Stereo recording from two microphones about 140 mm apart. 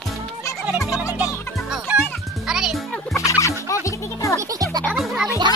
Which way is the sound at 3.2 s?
20° left (ahead or behind).